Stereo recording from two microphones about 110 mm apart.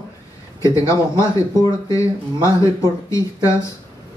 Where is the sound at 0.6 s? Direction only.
30° left (ahead or behind).